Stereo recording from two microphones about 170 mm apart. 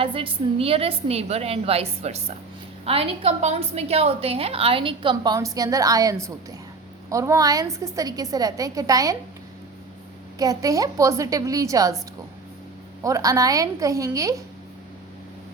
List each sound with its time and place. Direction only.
0.0 s a woman's voice: 30° right (ahead or behind)
10.3 s a woman's voice: 20° right (ahead or behind)
13.0 s a woman's voice: 20° right (ahead or behind)